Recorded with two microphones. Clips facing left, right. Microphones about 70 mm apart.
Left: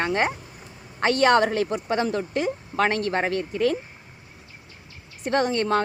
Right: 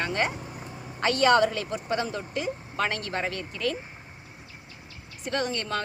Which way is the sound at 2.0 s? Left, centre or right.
Left.